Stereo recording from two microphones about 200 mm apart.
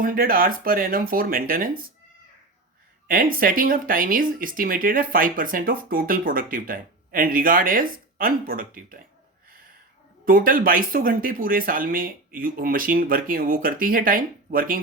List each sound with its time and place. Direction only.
0.0 s speech: 45° right (ahead or behind)
3.1 s speech: 45° right (ahead or behind)
10.2 s speech: 45° right (ahead or behind)